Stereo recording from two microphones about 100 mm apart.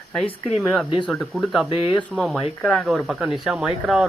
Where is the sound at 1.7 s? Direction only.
60° left (ahead or behind).